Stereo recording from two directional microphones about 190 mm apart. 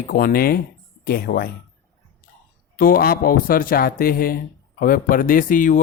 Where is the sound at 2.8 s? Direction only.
50° left (ahead or behind).